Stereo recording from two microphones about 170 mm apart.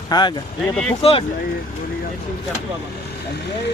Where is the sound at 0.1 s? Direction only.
25° left (ahead or behind).